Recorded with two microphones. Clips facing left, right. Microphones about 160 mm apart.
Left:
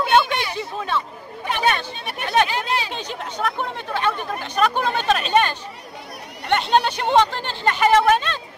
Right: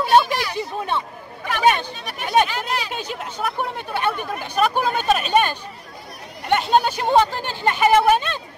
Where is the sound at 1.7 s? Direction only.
15° right (ahead or behind).